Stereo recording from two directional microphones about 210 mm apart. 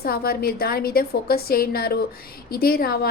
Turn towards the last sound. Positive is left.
turn(degrees=45)  # may be behind; listen again after turning